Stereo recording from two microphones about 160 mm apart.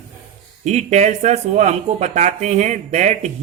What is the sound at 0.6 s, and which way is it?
Speech, 45° right (ahead or behind).